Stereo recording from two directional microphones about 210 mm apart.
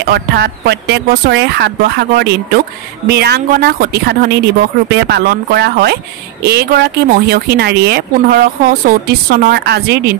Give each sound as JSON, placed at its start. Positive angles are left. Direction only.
{"t": 0.0, "sound": "speech", "side_deg": -50}